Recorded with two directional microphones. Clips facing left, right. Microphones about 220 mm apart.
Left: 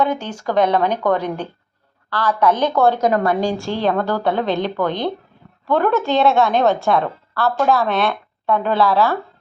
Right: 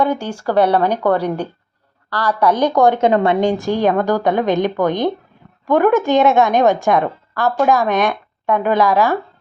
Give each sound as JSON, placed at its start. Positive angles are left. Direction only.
{"t": 0.0, "sound": "a woman's voice", "side_deg": -10}
{"t": 3.0, "sound": "a woman's voice", "side_deg": -25}